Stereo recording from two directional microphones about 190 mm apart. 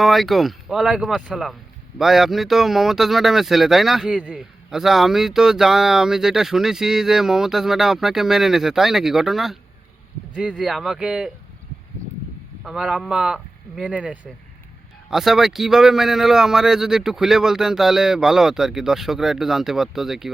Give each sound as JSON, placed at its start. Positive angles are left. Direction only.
{"t": 0.0, "sound": "speech", "side_deg": 0}
{"t": 12.6, "sound": "speech", "side_deg": -5}